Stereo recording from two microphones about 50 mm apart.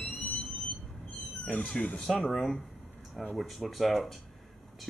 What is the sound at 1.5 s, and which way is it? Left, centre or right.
Speech, left.